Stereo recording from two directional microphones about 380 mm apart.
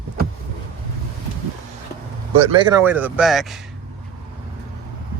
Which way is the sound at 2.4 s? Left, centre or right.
Centre.